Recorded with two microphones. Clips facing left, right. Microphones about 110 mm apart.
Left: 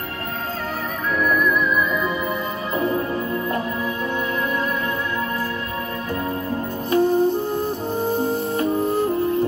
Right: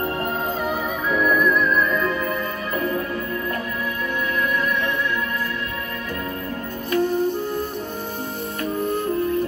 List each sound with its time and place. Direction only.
1.1 s music: centre (ahead or behind)
6.9 s music: 40° left (ahead or behind)
8.5 s music: 30° left (ahead or behind)